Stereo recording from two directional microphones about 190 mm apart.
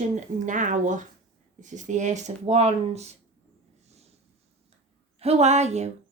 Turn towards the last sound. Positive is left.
turn(degrees=-35)  # may be behind; listen again after turning